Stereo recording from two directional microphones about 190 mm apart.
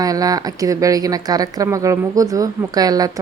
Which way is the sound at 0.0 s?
20° right (ahead or behind).